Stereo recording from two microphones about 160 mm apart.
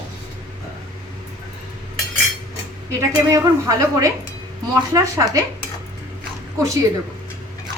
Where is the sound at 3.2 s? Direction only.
20° right (ahead or behind).